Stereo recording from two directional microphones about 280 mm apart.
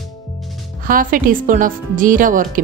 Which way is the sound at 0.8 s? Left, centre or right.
Right.